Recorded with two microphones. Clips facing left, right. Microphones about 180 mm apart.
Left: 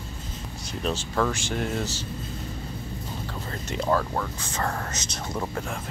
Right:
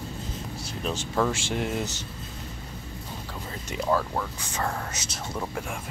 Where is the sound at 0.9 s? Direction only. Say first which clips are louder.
Right 2 dB; 15° right (ahead or behind).